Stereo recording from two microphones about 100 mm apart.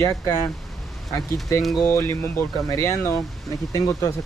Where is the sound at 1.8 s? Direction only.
25° left (ahead or behind).